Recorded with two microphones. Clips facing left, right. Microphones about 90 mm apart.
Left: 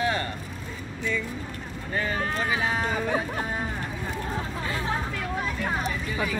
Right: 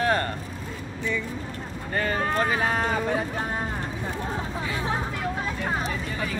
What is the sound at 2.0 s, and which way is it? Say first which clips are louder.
Speech: right 3 dB; 50° right (ahead or behind).